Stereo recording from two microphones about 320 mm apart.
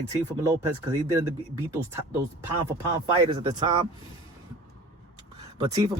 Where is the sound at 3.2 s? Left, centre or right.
Centre.